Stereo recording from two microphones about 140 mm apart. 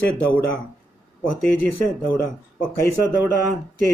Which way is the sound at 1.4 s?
10° left (ahead or behind).